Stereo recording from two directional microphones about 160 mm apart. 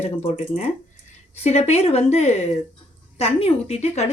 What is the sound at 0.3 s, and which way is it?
A woman's voice, 50° left (ahead or behind).